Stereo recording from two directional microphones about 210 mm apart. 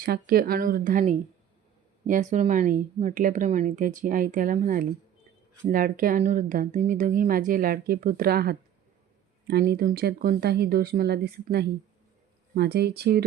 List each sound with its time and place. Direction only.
0.0 s speech: 45° right (ahead or behind)